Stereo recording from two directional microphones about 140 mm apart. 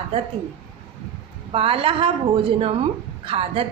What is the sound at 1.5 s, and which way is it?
A woman's voice, 40° right (ahead or behind).